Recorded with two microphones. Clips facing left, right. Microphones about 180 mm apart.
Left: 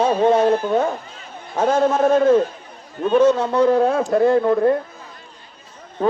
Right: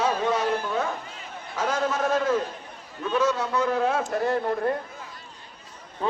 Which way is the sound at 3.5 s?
40° left (ahead or behind).